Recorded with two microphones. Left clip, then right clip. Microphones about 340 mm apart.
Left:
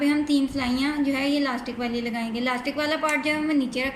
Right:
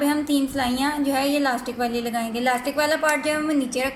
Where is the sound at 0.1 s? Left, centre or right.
Right.